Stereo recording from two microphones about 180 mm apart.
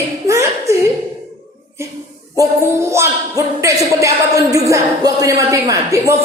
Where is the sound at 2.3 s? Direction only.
15° right (ahead or behind).